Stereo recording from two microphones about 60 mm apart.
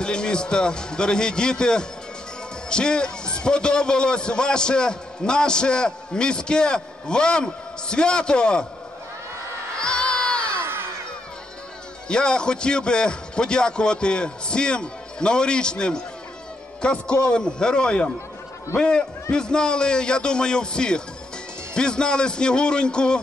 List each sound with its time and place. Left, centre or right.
0.0 s a man's voice: centre
9.8 s crowd: centre
10.6 s a sound: right
12.1 s a man's voice: centre